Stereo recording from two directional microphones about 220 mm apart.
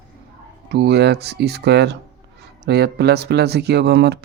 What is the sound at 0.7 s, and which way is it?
Speech, 50° right (ahead or behind).